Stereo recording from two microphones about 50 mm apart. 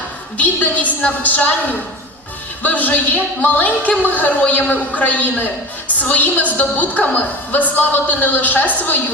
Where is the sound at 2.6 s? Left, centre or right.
Left.